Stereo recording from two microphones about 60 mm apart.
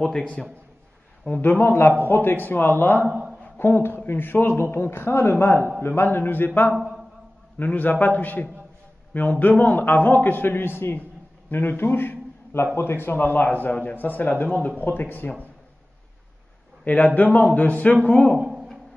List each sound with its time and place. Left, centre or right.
0.0 s a man's voice: centre
1.3 s speech: left
6.7 s a man's voice: centre
7.5 s a man's voice: left
16.8 s a man's voice: left
18.4 s a sound: centre